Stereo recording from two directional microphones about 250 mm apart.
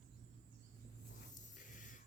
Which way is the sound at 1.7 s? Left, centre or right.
Left.